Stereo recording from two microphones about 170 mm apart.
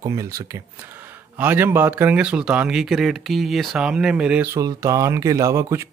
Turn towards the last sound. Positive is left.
turn(degrees=-15)  # may be behind; listen again after turning